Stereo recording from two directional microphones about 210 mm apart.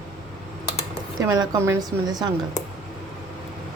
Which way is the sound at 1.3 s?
15° right (ahead or behind).